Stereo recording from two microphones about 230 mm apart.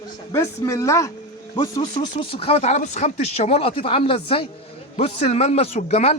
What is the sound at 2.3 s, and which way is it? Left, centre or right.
Speech, left.